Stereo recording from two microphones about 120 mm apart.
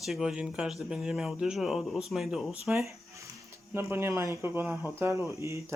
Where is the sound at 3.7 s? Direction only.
20° right (ahead or behind).